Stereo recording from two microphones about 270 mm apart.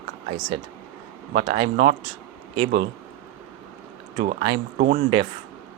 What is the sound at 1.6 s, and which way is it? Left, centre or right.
Speech, right.